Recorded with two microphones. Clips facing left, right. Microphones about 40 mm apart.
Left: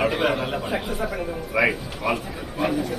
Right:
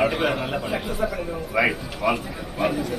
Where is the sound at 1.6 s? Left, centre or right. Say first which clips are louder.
Right 1 dB; right.